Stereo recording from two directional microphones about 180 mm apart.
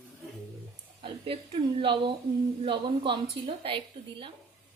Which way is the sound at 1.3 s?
30° right (ahead or behind).